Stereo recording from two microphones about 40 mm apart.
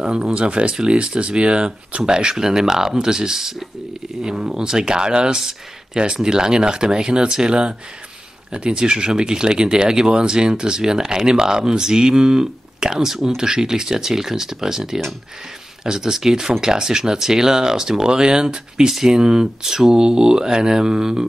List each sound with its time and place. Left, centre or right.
0.0 s speech: right
2.0 s speech: centre